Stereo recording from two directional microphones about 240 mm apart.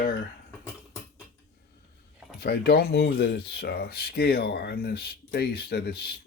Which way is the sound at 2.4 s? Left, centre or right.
Left.